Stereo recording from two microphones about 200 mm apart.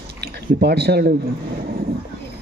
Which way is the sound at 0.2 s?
55° right (ahead or behind).